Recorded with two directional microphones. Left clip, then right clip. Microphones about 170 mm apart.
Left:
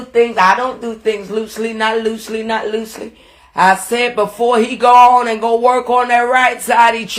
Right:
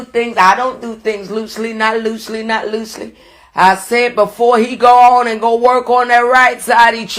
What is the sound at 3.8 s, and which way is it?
Speech, 30° right (ahead or behind).